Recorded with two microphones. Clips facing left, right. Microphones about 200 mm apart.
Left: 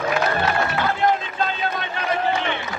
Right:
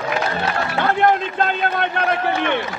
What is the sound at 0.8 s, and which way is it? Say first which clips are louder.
A man's voice: right 8 dB; 55° right (ahead or behind).